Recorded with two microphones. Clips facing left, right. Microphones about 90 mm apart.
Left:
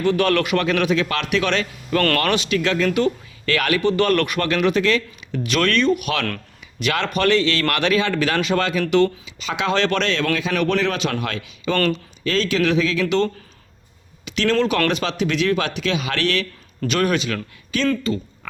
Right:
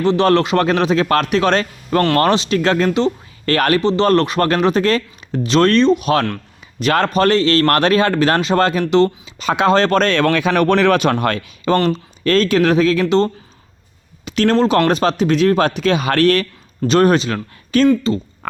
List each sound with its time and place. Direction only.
0.0 s speech: 30° right (ahead or behind)
2.0 s speech: 25° right (ahead or behind)
9.4 s speech: 45° right (ahead or behind)
14.3 s a sound: 45° right (ahead or behind)
14.5 s speech: 35° right (ahead or behind)